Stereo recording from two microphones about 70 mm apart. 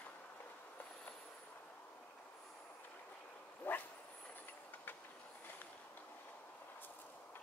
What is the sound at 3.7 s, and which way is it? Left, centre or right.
Dog, left.